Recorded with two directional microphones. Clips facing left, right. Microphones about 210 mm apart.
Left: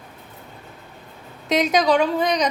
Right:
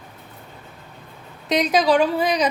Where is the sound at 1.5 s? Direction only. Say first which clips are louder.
Even; centre (ahead or behind).